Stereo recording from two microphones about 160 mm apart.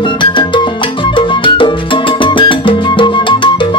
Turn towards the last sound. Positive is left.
turn(degrees=30)  # may be behind; listen again after turning